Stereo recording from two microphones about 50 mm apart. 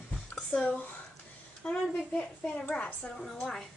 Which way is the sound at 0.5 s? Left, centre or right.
Centre.